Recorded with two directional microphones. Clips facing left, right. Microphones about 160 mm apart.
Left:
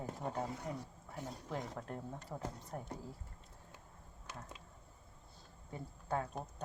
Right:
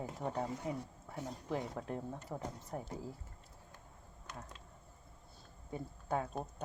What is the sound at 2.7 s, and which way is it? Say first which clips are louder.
Speech: right 5 dB; centre (ahead or behind).